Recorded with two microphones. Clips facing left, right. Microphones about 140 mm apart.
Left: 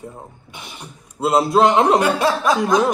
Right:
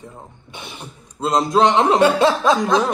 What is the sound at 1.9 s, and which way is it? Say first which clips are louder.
Speech: right 3 dB; 25° right (ahead or behind).